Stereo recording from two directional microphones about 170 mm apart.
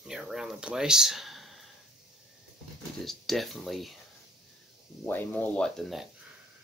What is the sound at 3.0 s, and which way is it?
Speech, centre (ahead or behind).